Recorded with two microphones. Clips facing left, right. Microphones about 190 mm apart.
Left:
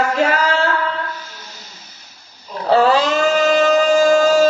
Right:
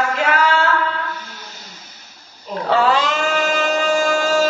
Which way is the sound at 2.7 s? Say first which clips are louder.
Left 4 dB; 35° left (ahead or behind).